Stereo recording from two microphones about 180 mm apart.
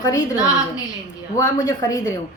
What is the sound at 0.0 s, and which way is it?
A woman's voice, 20° left (ahead or behind).